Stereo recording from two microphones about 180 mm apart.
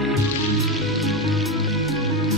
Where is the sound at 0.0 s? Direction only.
Centre (ahead or behind).